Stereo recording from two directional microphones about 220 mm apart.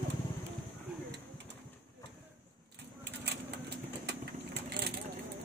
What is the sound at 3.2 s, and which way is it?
Vehicle, 50° right (ahead or behind).